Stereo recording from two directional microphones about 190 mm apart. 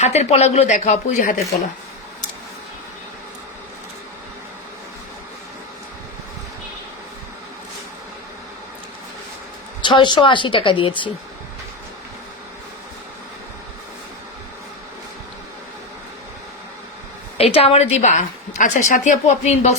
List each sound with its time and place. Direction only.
0.0 s a woman's voice: 35° left (ahead or behind)
9.8 s a woman's voice: 25° left (ahead or behind)
17.3 s a woman's voice: 30° left (ahead or behind)